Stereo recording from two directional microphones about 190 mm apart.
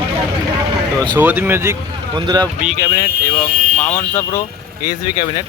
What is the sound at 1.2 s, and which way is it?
Speech, 10° right (ahead or behind).